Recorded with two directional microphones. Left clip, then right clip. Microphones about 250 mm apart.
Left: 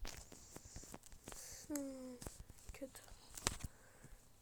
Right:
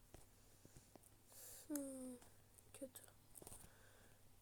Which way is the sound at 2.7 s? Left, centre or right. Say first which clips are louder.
Left 4 dB; centre.